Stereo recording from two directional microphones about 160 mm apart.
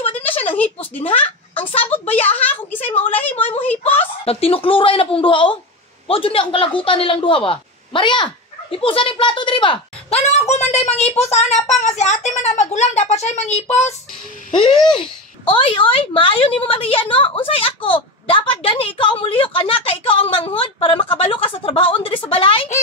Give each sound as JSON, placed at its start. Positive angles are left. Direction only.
{"t": 0.2, "sound": "a sound", "side_deg": 10}
{"t": 1.8, "sound": "a woman's voice", "side_deg": 10}
{"t": 2.8, "sound": "a child's voice", "side_deg": 35}
{"t": 3.3, "sound": "a woman's voice", "side_deg": 10}
{"t": 4.2, "sound": "a child's voice", "side_deg": 35}
{"t": 14.5, "sound": "a child's voice", "side_deg": 30}